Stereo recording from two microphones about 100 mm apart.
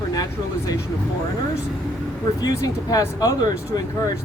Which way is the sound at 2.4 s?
40° left (ahead or behind).